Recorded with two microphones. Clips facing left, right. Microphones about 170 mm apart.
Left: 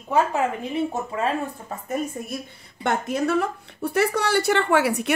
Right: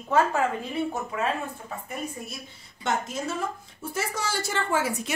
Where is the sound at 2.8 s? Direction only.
60° left (ahead or behind).